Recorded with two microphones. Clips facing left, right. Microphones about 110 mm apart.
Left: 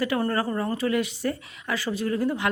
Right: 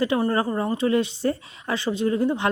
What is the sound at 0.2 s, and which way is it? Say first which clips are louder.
A woman's voice: right 3 dB; 20° right (ahead or behind).